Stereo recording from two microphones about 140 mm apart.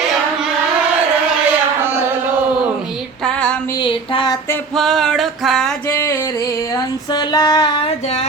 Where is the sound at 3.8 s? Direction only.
35° left (ahead or behind).